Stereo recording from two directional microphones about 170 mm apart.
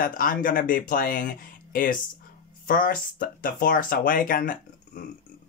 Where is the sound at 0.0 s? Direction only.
55° left (ahead or behind).